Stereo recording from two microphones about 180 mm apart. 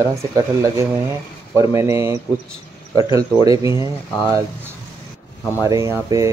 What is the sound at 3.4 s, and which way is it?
Speech, 20° right (ahead or behind).